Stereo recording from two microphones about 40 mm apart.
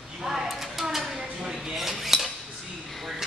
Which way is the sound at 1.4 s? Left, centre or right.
Centre.